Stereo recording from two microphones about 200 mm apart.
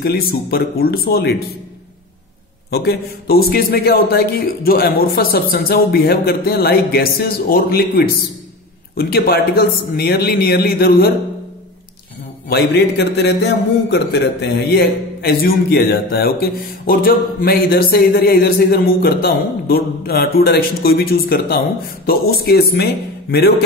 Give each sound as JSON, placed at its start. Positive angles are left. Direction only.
{"t": 0.0, "sound": "a man's voice", "side_deg": 50}
{"t": 2.7, "sound": "a man's voice", "side_deg": 55}
{"t": 12.4, "sound": "a man's voice", "side_deg": 55}